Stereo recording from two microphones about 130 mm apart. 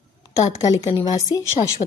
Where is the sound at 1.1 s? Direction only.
25° left (ahead or behind).